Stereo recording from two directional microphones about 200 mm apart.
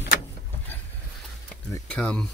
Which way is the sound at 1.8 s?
5° left (ahead or behind).